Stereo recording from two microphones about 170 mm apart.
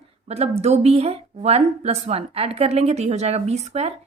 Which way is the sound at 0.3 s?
35° right (ahead or behind).